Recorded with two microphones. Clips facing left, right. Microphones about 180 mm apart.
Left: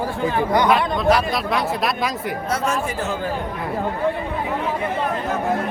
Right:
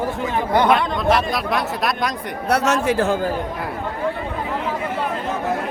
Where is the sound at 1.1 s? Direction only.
Centre (ahead or behind).